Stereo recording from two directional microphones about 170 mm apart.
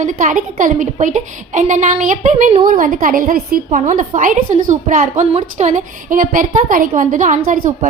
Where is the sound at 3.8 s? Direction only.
45° right (ahead or behind).